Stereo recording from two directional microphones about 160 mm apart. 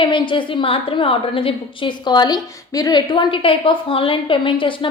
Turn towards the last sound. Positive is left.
turn(degrees=30)  # may be behind; listen again after turning